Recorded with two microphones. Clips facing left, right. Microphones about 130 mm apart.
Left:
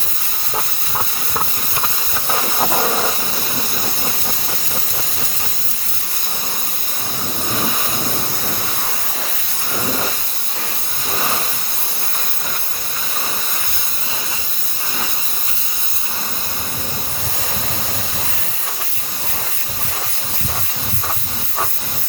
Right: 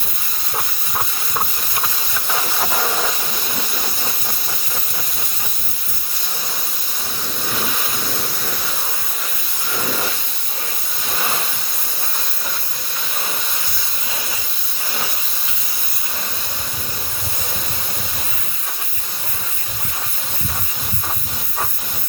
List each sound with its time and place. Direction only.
2.2 s hiss: 25° left (ahead or behind)